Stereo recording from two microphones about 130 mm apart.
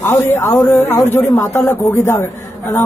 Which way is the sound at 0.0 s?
20° left (ahead or behind).